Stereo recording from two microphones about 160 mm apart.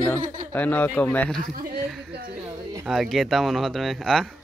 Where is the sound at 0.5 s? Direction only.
10° left (ahead or behind).